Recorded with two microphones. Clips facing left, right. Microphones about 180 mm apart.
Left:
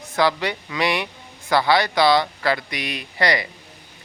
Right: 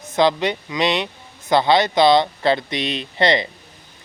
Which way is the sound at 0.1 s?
20° right (ahead or behind).